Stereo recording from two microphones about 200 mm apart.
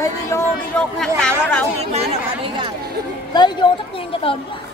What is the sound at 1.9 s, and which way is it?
Speech, 25° right (ahead or behind).